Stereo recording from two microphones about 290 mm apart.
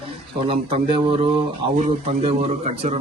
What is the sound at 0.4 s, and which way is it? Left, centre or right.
A man's voice, centre.